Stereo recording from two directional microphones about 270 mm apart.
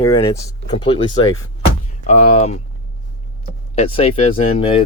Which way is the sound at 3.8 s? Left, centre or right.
Left.